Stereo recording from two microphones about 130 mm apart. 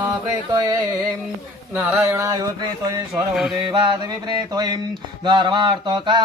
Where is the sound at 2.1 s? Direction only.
20° right (ahead or behind).